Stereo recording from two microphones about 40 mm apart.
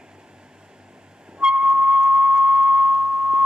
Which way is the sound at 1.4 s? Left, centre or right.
Right.